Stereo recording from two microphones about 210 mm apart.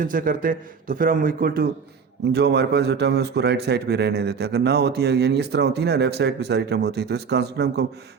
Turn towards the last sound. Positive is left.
turn(degrees=-50)  # may be behind; listen again after turning